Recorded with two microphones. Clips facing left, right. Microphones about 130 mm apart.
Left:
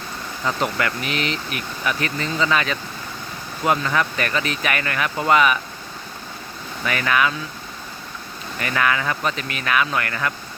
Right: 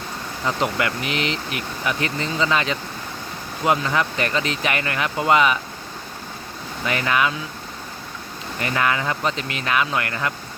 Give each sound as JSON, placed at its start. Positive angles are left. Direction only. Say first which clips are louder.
{"t": 0.4, "sound": "speech", "louder": "even", "side_deg": -20}
{"t": 6.8, "sound": "speech", "louder": "even", "side_deg": -25}
{"t": 8.5, "sound": "speech", "louder": "even", "side_deg": -25}